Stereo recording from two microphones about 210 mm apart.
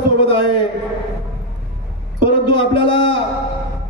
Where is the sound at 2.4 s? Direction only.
25° left (ahead or behind).